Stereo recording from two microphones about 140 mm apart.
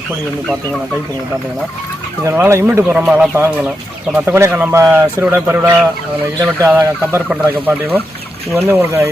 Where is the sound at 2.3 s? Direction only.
20° right (ahead or behind).